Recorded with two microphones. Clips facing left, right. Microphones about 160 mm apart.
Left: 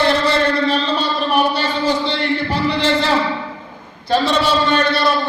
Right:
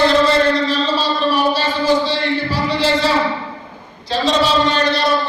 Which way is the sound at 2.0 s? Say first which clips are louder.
Even; 60° left (ahead or behind).